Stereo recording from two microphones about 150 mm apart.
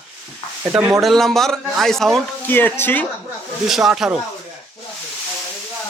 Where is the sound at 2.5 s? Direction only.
15° left (ahead or behind).